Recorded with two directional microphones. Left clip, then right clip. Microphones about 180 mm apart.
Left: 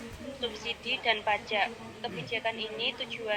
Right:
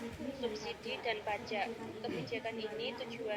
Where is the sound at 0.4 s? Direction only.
5° right (ahead or behind).